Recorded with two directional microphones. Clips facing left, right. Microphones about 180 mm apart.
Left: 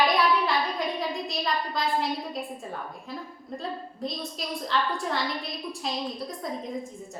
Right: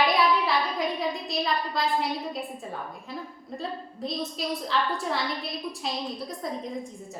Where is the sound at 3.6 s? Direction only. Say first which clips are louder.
Even; centre (ahead or behind).